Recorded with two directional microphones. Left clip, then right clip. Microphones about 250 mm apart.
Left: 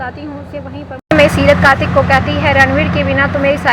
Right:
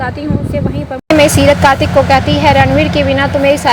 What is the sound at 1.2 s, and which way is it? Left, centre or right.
A woman's voice, centre.